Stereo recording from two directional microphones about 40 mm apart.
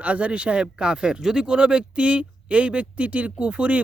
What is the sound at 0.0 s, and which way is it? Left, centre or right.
Speech, right.